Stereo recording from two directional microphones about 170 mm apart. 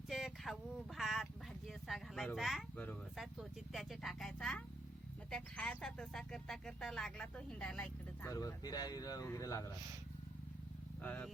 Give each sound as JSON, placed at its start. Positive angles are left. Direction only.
{"t": 0.1, "sound": "a sound", "side_deg": 0}
{"t": 2.7, "sound": "speech", "side_deg": 10}
{"t": 3.2, "sound": "speech", "side_deg": 0}
{"t": 8.3, "sound": "speech", "side_deg": 20}
{"t": 11.0, "sound": "speech", "side_deg": 10}